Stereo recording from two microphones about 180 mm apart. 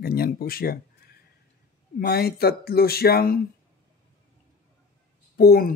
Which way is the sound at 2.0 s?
60° left (ahead or behind).